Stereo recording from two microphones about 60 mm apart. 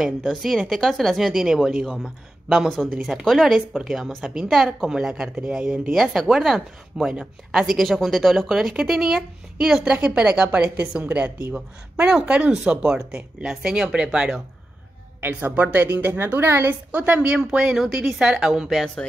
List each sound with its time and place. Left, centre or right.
0.0 s a woman's voice: centre
5.9 s a woman's voice: centre
15.2 s a woman's voice: right
16.9 s speech: right